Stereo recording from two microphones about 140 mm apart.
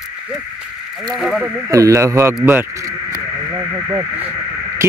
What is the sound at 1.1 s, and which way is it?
Speech, centre (ahead or behind).